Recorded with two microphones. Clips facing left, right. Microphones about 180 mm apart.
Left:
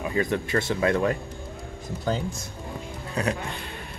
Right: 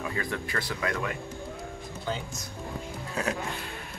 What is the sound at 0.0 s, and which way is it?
Speech, 20° left (ahead or behind).